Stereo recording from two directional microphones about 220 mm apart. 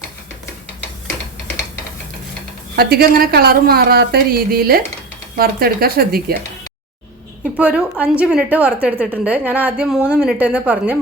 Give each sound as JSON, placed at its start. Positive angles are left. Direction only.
{"t": 2.7, "sound": "a woman's voice", "side_deg": -45}
{"t": 7.5, "sound": "a woman's voice", "side_deg": -5}